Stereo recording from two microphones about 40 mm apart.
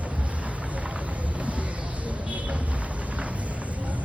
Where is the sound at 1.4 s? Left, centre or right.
Right.